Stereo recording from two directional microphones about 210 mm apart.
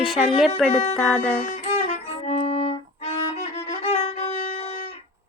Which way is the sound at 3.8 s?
30° left (ahead or behind).